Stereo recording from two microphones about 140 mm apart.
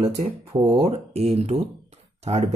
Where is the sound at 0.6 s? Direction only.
25° right (ahead or behind).